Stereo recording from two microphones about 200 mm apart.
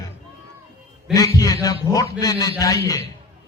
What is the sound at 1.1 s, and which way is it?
A man's voice, 15° left (ahead or behind).